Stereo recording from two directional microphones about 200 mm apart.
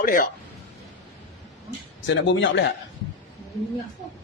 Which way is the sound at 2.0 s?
65° left (ahead or behind).